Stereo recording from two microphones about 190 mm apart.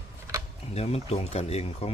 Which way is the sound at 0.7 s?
35° left (ahead or behind).